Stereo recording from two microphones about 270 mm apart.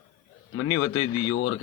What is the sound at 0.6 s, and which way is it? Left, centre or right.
Speech, left.